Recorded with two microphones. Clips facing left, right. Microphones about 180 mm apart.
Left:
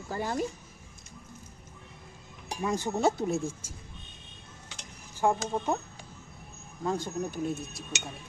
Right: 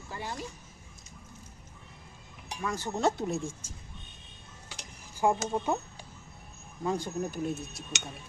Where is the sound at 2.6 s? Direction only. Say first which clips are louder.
Left 4 dB; 15° left (ahead or behind).